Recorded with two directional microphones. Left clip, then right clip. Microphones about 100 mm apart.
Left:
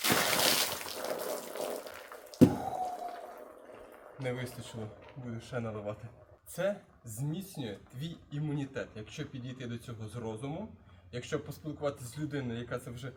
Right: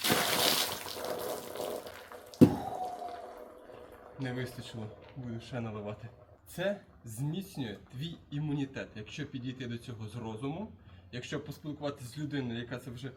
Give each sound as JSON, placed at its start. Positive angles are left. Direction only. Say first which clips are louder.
{"t": 0.0, "sound": "a sound", "louder": "even", "side_deg": -20}
{"t": 4.2, "sound": "speech", "louder": "left 1 dB", "side_deg": 15}
{"t": 7.2, "sound": "speech", "louder": "right 1 dB", "side_deg": 15}